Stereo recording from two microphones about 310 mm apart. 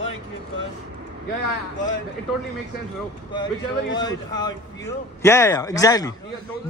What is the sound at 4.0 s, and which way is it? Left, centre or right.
A man's voice, centre.